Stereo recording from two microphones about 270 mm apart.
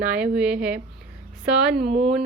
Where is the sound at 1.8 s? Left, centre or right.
Right.